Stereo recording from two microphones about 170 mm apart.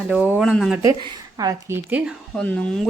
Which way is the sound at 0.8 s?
20° right (ahead or behind).